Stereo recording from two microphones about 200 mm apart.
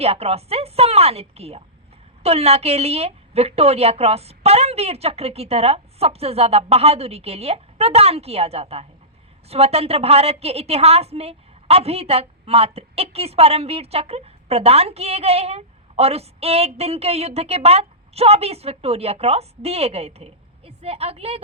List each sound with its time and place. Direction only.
0.0 s a woman's voice: 30° right (ahead or behind)